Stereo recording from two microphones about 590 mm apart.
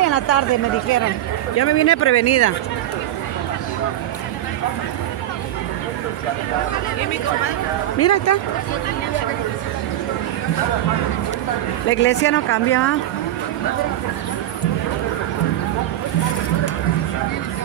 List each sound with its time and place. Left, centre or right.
0.0 s a sound: left
1.6 s speech: left
8.0 s speech: left
11.9 s speech: centre